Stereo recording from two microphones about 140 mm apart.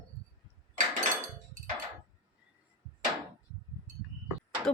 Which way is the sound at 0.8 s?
70° right (ahead or behind).